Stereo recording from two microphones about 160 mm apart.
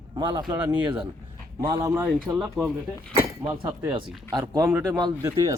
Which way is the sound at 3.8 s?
25° right (ahead or behind).